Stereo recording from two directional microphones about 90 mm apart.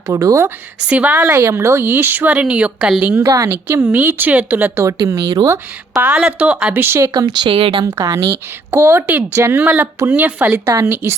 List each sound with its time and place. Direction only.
0.1 s speech: 35° right (ahead or behind)
0.9 s a woman's voice: 15° right (ahead or behind)
1.2 s speech: 30° right (ahead or behind); by 2.9 s 10° right (ahead or behind)
3.0 s speech: 25° right (ahead or behind)
3.7 s speech: 20° right (ahead or behind)
4.9 s speech: 35° right (ahead or behind)
6.0 s a woman's voice: 15° right (ahead or behind)
7.1 s speech: 50° right (ahead or behind)
7.5 s speech: 75° right (ahead or behind)
7.9 s a woman's voice: 35° right (ahead or behind)